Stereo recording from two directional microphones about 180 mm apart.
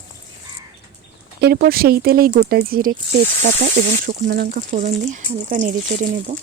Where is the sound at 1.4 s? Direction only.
60° right (ahead or behind).